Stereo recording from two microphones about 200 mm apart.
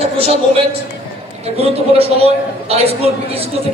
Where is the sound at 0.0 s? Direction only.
30° right (ahead or behind).